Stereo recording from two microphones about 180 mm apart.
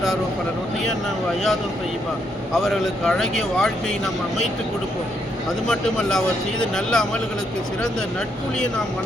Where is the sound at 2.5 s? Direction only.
Centre (ahead or behind).